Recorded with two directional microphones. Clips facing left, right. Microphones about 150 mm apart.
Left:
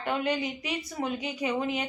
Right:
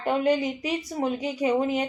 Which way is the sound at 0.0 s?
40° right (ahead or behind).